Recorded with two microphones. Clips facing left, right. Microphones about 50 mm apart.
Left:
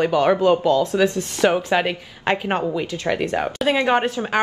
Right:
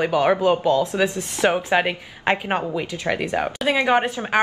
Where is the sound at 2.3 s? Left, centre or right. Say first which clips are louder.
Left 5 dB; centre.